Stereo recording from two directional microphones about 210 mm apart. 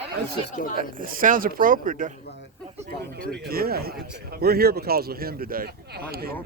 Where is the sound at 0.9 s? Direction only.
40° right (ahead or behind).